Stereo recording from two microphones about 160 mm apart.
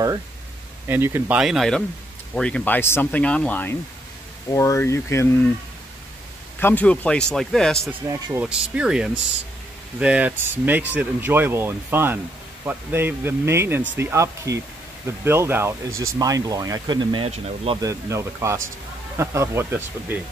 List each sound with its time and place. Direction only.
0.8 s speech: 15° right (ahead or behind)
1.4 s speech: centre (ahead or behind); by 5.5 s 15° left (ahead or behind)
6.6 s speech: 10° left (ahead or behind)
8.1 s speech: 20° right (ahead or behind)
8.5 s speech: 5° right (ahead or behind); by 17.7 s 35° right (ahead or behind)
17.8 s speech: 15° right (ahead or behind)